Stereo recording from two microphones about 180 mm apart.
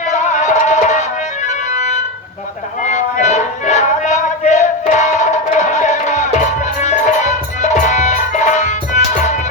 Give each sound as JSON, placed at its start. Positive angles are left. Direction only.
{"t": 0.1, "sound": "music", "side_deg": 40}